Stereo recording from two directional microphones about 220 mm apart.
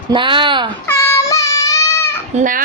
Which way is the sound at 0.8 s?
10° left (ahead or behind).